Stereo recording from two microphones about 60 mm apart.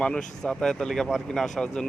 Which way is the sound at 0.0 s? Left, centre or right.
Centre.